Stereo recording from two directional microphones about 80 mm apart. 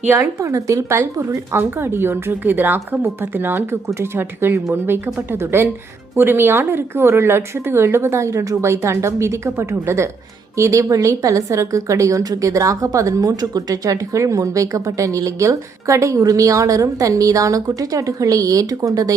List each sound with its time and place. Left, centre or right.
0.0 s speech: right
0.3 s speech: right